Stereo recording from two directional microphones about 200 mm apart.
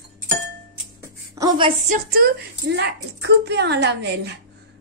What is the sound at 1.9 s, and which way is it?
A woman's voice, 50° right (ahead or behind).